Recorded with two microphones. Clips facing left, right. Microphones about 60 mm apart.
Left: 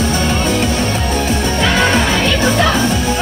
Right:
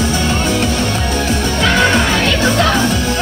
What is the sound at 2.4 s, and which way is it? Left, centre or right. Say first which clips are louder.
Music: even; centre.